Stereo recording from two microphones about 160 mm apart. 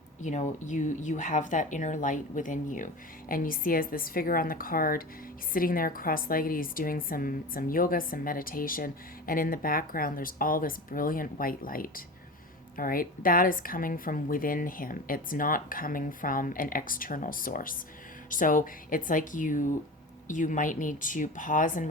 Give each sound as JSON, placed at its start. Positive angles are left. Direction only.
{"t": 0.2, "sound": "a woman's voice", "side_deg": 50}